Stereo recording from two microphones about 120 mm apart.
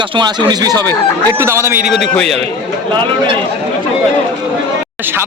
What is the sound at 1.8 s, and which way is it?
Speech, centre (ahead or behind).